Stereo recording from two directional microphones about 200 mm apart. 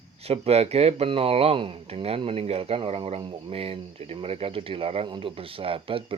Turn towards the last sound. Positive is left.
turn(degrees=-25)  # may be behind; listen again after turning